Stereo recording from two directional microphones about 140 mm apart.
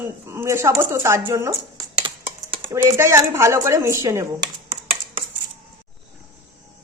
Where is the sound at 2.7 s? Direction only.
20° right (ahead or behind).